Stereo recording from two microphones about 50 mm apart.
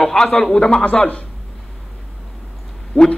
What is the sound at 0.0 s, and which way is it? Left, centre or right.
Speech, centre.